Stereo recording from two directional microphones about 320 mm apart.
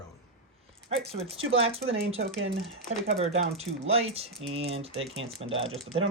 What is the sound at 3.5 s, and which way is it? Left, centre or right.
Speech, centre.